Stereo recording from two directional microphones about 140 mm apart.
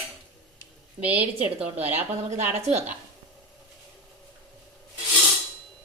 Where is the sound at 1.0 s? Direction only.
10° right (ahead or behind).